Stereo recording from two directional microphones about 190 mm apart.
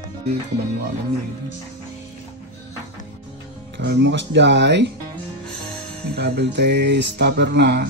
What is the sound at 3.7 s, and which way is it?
Music, 65° right (ahead or behind).